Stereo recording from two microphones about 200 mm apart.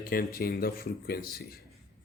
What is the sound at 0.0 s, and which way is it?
Speech, 45° left (ahead or behind).